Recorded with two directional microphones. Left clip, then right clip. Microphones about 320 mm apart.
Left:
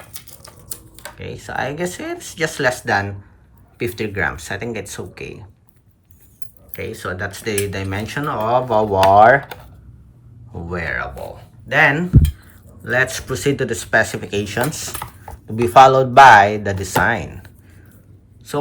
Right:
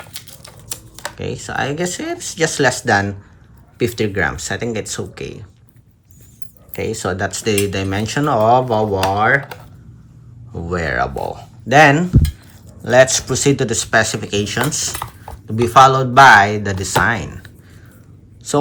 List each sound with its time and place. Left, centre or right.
1.2 s speech: centre
6.7 s a woman's voice: centre